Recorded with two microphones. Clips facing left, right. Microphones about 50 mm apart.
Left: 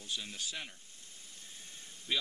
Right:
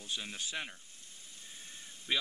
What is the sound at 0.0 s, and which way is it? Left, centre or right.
Speech, right.